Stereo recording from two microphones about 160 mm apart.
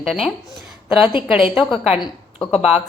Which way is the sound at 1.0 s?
30° left (ahead or behind).